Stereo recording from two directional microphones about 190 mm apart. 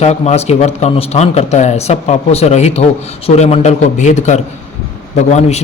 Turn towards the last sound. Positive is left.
turn(degrees=35)  # may be behind; listen again after turning